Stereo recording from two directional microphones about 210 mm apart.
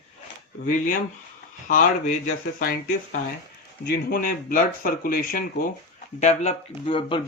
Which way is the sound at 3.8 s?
50° left (ahead or behind).